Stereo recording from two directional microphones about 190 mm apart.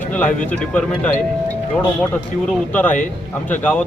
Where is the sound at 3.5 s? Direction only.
10° left (ahead or behind).